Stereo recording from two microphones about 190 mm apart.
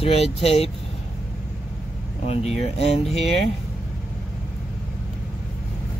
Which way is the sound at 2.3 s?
35° left (ahead or behind).